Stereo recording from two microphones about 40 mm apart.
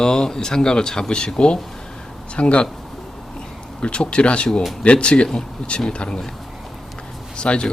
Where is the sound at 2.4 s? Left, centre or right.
Left.